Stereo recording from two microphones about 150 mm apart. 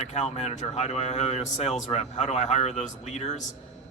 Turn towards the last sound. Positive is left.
turn(degrees=45)  # may be behind; listen again after turning